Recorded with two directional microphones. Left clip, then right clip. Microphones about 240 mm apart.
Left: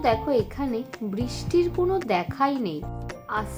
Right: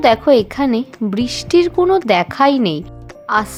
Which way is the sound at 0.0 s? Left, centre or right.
Right.